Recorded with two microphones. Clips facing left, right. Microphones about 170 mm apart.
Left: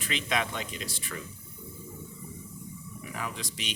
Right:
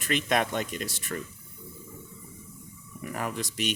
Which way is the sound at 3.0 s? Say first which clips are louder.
Right 5 dB; 50° right (ahead or behind).